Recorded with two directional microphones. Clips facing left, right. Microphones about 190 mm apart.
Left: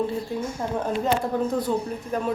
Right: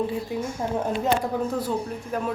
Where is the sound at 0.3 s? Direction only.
15° right (ahead or behind).